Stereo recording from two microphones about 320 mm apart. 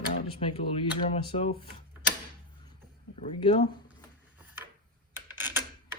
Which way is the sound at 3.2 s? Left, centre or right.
Centre.